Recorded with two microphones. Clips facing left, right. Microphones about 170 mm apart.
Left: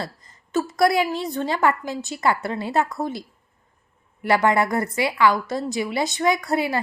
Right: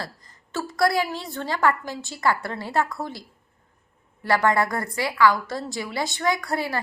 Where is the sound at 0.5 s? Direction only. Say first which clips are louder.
Left 3 dB; 20° left (ahead or behind).